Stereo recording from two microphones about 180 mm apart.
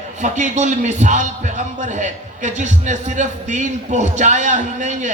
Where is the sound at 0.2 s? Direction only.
40° right (ahead or behind).